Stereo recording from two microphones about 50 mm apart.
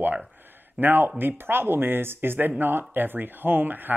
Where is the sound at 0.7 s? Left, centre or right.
Right.